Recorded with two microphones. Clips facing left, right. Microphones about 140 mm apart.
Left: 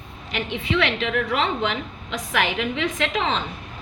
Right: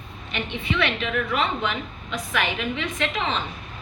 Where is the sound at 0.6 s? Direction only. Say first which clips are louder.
Left 2 dB; 85° left.